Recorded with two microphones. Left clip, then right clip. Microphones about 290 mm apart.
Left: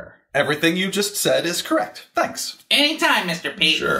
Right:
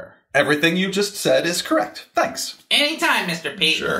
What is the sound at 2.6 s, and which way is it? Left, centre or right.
Speech, left.